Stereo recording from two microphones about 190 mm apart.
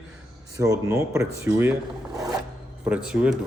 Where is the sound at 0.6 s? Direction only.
15° right (ahead or behind).